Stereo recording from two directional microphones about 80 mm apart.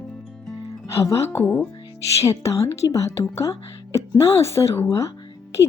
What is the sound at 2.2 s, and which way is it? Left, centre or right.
Speech, left.